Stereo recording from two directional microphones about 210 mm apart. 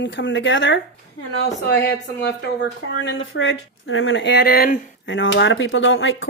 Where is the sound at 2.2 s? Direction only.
55° left (ahead or behind).